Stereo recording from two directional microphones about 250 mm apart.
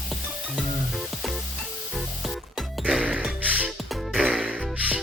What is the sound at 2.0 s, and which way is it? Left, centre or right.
Music, centre.